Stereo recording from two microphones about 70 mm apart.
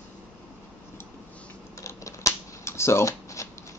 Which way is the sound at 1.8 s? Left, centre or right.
Left.